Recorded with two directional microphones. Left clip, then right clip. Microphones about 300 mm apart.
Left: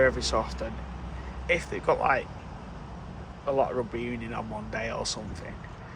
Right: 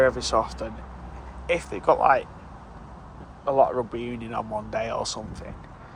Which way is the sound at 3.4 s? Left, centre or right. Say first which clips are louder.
Right 6 dB; centre.